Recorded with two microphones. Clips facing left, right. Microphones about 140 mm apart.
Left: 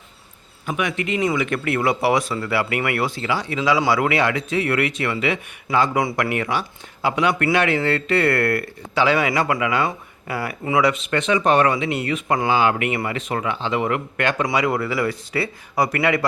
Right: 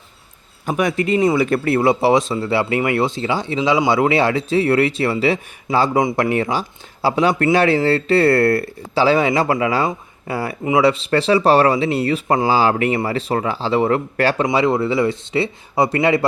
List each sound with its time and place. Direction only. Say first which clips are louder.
0.6 s speech: right 5 dB; 35° right (ahead or behind)